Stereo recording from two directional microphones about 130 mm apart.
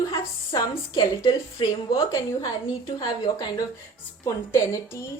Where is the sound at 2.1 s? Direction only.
25° left (ahead or behind).